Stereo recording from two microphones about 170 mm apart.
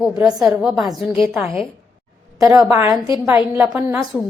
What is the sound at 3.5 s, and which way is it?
Speech, 10° right (ahead or behind).